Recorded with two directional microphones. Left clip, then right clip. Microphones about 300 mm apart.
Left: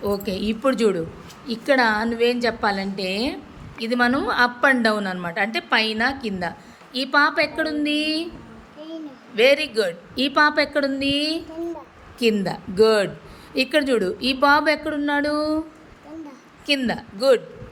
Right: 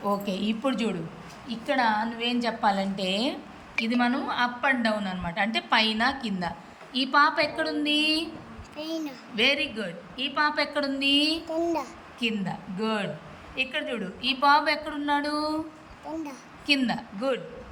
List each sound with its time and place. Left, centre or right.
0.0 s a woman's voice: centre
8.8 s a sound: right
9.3 s a woman's voice: centre
16.6 s a woman's voice: centre